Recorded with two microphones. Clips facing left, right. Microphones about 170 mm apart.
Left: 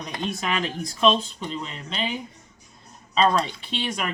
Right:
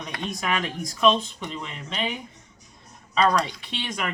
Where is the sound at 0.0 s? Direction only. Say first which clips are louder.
Left 1 dB; 30° left (ahead or behind).